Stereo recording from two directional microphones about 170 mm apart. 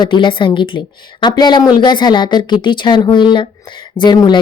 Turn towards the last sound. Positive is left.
turn(degrees=25)  # may be behind; listen again after turning